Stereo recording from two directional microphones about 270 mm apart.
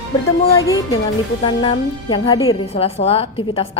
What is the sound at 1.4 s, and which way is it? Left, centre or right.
A woman's voice, centre.